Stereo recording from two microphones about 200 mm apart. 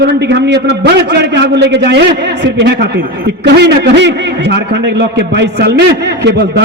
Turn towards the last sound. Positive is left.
turn(degrees=-55)  # may be behind; listen again after turning